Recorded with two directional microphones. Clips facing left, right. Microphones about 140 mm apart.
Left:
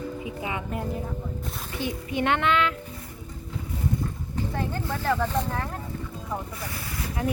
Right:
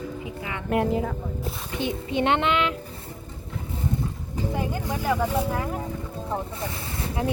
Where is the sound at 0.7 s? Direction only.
85° right.